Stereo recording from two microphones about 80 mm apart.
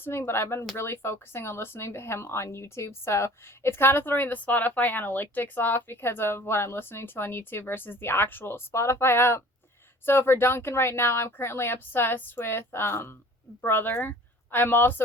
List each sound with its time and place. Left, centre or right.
0.0 s a woman's voice: left